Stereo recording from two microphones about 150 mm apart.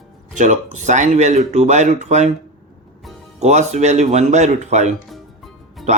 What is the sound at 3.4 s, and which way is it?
A man's voice, 50° right (ahead or behind).